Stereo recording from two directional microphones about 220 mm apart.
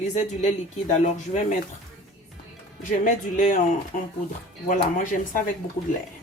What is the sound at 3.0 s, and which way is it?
Speech, 35° left (ahead or behind).